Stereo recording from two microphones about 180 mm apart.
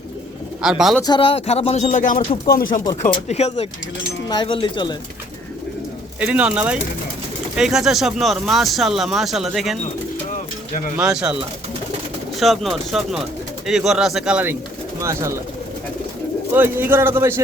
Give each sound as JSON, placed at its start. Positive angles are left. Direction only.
{"t": 0.6, "sound": "speech", "side_deg": -5}
{"t": 1.0, "sound": "speech", "side_deg": 25}
{"t": 3.1, "sound": "speech", "side_deg": 35}
{"t": 4.3, "sound": "speech", "side_deg": 25}
{"t": 6.1, "sound": "speech", "side_deg": -5}
{"t": 10.9, "sound": "speech", "side_deg": -5}
{"t": 16.6, "sound": "speech", "side_deg": -10}